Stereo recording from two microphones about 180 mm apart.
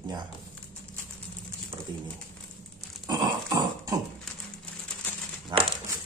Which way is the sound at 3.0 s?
20° right (ahead or behind).